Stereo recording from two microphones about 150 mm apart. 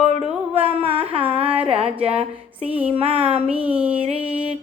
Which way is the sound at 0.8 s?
35° right (ahead or behind).